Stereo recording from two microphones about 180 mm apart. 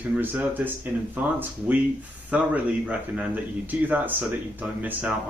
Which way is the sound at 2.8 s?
10° right (ahead or behind).